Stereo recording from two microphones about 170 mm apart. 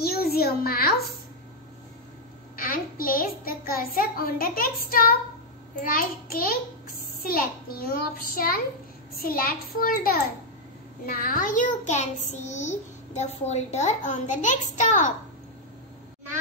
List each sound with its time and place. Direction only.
0.0 s a child's voice: 65° left (ahead or behind)
2.5 s a child's voice: 55° left (ahead or behind)